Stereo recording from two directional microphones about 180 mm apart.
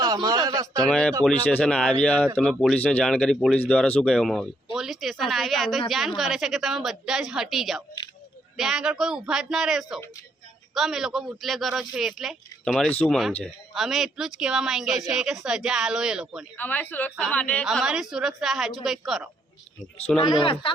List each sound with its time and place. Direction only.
0.0 s a man's voice: 20° right (ahead or behind)
0.8 s speech: 5° left (ahead or behind)
16.6 s speech: 10° left (ahead or behind)
17.7 s speech: 5° right (ahead or behind)
20.2 s speech: 30° left (ahead or behind)